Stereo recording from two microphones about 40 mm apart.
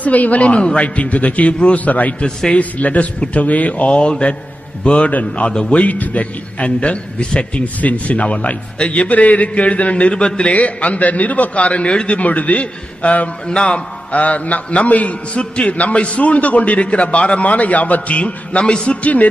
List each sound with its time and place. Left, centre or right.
0.0 s a man's voice: left
5.9 s a man's voice: left
10.5 s a man's voice: left
11.9 s a man's voice: left
12.2 s a man's voice: left
13.5 s a man's voice: left